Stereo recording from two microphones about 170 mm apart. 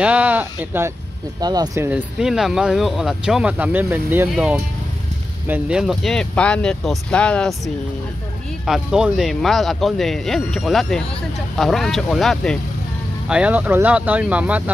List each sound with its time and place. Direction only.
0.0 s speech: 5° right (ahead or behind)
1.4 s speech: 25° right (ahead or behind)
1.9 s speech: 5° right (ahead or behind)